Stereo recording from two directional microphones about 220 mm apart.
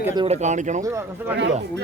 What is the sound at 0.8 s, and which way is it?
Speech, 15° right (ahead or behind).